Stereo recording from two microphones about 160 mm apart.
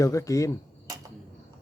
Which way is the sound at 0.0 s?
20° left (ahead or behind).